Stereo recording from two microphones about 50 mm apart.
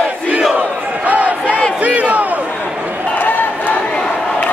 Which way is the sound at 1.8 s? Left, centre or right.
Right.